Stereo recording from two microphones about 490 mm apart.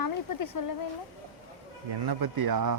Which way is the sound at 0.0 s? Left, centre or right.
Left.